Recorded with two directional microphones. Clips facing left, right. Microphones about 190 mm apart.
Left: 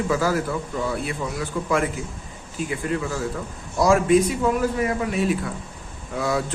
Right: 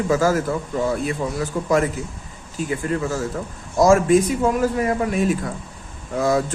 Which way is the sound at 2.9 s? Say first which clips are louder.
Right 2 dB; 40° right (ahead or behind).